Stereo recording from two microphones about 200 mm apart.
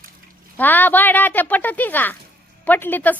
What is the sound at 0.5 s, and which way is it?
Speech, 10° left (ahead or behind).